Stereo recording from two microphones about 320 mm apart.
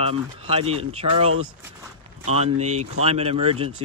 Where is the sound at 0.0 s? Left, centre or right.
Centre.